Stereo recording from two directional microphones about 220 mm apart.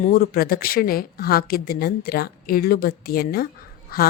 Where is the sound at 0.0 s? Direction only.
40° left (ahead or behind).